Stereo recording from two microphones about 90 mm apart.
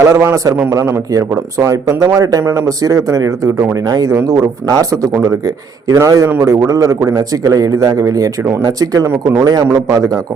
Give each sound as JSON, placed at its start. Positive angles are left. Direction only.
{"t": 0.0, "sound": "a man's voice", "side_deg": -30}
{"t": 5.9, "sound": "a man's voice", "side_deg": -40}